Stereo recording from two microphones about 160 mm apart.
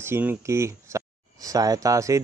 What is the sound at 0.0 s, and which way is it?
Speech, 15° right (ahead or behind).